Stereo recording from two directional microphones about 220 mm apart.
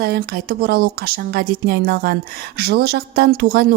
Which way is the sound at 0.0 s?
45° right (ahead or behind).